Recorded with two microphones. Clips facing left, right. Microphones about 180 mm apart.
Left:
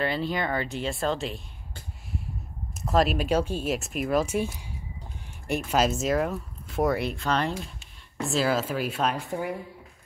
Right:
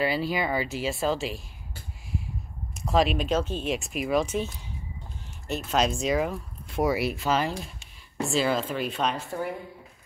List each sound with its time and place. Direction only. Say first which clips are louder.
0.0 s speech: right 1 dB; 5° right (ahead or behind)
2.7 s speech: even; centre (ahead or behind)
5.5 s speech: left 1 dB; 10° left (ahead or behind)